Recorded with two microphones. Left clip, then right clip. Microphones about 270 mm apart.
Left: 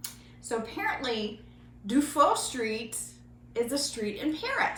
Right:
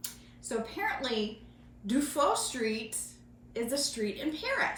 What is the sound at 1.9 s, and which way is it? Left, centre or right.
A woman's voice, centre.